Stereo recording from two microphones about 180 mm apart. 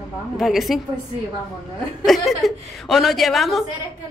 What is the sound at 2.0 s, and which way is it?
A woman's voice, centre (ahead or behind).